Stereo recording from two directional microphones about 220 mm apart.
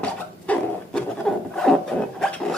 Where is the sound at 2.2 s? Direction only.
Centre (ahead or behind).